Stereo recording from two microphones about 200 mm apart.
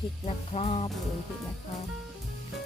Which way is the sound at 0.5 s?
30° left (ahead or behind).